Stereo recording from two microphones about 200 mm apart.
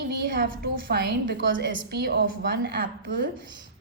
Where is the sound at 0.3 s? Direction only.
45° right (ahead or behind).